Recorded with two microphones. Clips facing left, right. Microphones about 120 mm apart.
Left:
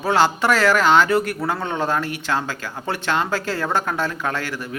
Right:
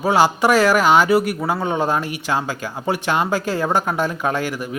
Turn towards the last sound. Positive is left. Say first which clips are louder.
# right 4 dB
turn(degrees=-15)  # may be behind; listen again after turning